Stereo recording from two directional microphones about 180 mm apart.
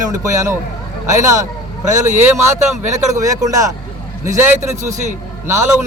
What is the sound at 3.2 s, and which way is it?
Speech, 20° right (ahead or behind).